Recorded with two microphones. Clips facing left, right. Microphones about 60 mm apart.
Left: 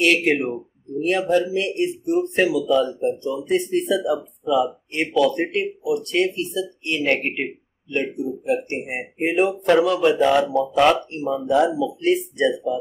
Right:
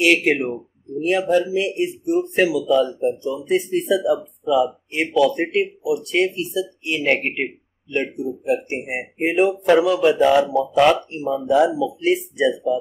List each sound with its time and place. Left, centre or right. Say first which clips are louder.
0.0 s speech: right 1 dB; centre
4.9 s speech: right 1 dB; centre